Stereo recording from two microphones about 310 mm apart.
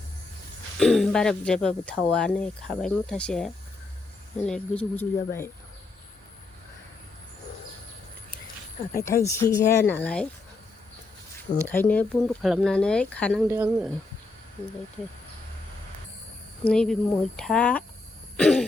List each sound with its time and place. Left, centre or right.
0.8 s speech: centre
8.9 s speech: centre
11.7 s speech: centre
16.6 s speech: centre
18.3 s throat clearing: centre